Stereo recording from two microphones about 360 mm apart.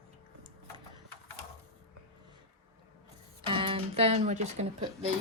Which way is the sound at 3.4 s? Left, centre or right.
Centre.